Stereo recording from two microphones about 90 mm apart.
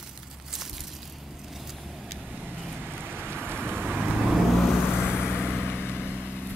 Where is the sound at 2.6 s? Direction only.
10° left (ahead or behind).